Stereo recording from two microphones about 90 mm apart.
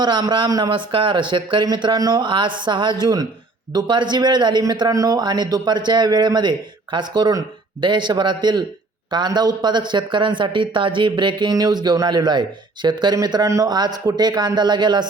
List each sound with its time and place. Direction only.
0.0 s speech: 60° right (ahead or behind)
0.7 s a man's voice: 70° right (ahead or behind); by 2.2 s 50° right (ahead or behind)
2.2 s speech: 60° right (ahead or behind)
4.9 s a man's voice: 40° right (ahead or behind); by 11.5 s 60° right (ahead or behind)
11.5 s a man's voice: 50° right (ahead or behind)